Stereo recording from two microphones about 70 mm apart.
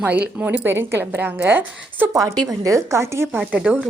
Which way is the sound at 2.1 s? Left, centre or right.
Right.